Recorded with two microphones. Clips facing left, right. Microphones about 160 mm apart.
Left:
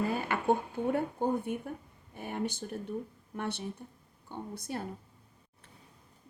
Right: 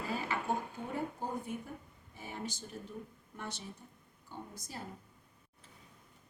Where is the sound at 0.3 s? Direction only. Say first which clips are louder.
Left 4 dB; 60° left (ahead or behind).